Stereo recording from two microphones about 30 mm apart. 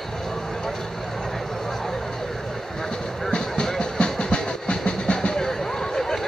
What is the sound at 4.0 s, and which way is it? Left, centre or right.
Train, left.